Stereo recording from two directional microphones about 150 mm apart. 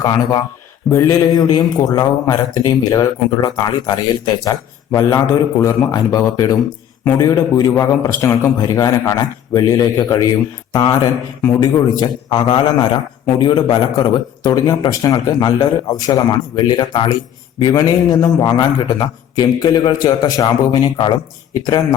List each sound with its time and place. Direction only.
0.0 s a man's voice: 25° left (ahead or behind)